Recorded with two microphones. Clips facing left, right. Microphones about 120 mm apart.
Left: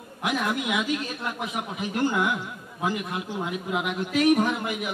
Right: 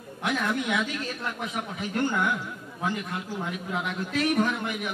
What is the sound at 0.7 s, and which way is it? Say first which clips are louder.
Speech: left 2 dB; 15° left (ahead or behind).